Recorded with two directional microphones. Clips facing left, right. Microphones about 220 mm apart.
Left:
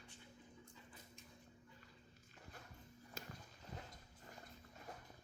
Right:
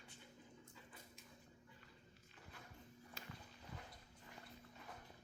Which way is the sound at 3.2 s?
45° left (ahead or behind).